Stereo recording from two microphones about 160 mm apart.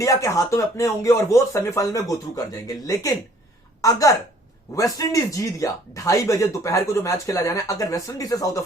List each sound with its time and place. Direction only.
0.0 s a woman's voice: 20° left (ahead or behind)